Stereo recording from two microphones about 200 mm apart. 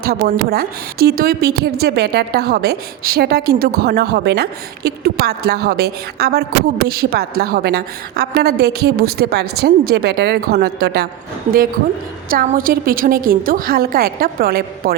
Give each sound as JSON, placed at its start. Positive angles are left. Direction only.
{"t": 0.0, "sound": "a woman's voice", "side_deg": -50}
{"t": 12.3, "sound": "a woman's voice", "side_deg": -45}